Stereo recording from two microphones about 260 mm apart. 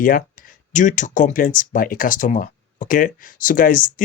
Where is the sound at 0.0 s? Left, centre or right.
Left.